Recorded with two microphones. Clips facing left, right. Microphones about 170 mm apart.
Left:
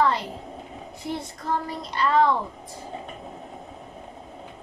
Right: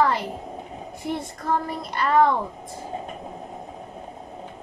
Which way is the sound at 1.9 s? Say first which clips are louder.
Right 1 dB; 55° right (ahead or behind).